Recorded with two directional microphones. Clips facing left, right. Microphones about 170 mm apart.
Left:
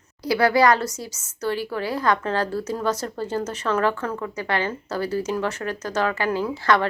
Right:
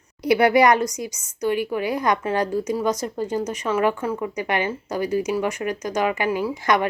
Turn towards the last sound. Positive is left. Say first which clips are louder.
# even
turn(degrees=-15)  # may be behind; listen again after turning